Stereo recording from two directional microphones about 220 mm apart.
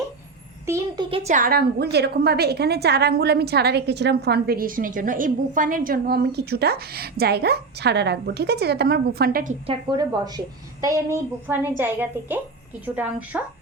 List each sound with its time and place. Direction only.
0.6 s a woman's voice: 15° right (ahead or behind)
1.1 s a woman's voice: 30° right (ahead or behind)
9.6 s a woman's voice: 20° right (ahead or behind)